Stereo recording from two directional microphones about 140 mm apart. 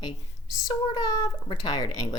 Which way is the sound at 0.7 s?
30° left (ahead or behind).